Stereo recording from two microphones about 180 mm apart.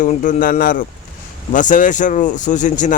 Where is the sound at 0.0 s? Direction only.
45° left (ahead or behind).